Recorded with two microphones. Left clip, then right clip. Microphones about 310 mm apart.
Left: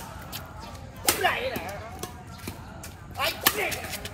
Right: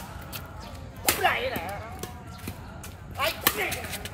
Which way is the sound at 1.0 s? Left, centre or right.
Centre.